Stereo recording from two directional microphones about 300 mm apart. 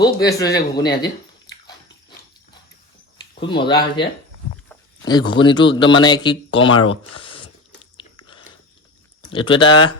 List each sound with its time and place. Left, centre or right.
0.0 s a sound: centre
3.4 s a man's voice: centre
7.2 s biting: centre
9.3 s speech: centre